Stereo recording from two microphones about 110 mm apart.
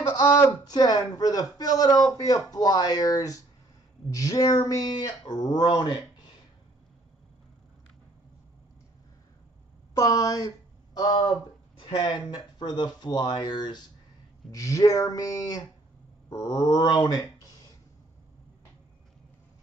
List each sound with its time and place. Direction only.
0.1 s a man's voice: 40° left (ahead or behind)
9.9 s a man's voice: 30° left (ahead or behind)
11.8 s a man's voice: 45° left (ahead or behind)